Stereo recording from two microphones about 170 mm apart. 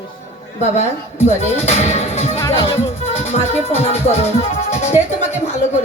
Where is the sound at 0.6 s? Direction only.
40° left (ahead or behind).